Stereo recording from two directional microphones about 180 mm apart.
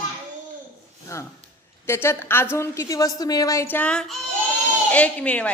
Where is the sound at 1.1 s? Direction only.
15° left (ahead or behind).